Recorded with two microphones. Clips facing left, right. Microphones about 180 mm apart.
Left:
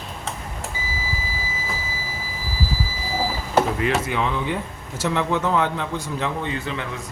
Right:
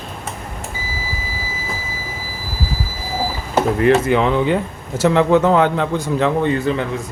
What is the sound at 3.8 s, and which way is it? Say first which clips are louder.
Speech: right 9 dB; 60° right (ahead or behind).